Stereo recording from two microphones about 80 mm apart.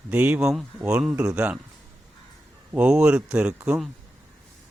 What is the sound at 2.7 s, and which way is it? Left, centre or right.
A man's voice, centre.